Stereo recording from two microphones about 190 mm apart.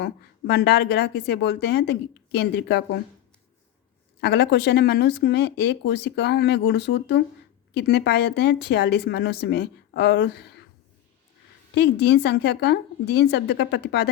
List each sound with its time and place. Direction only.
0.0 s speech: 60° left (ahead or behind)
4.2 s speech: 60° left (ahead or behind)
11.7 s speech: 60° left (ahead or behind)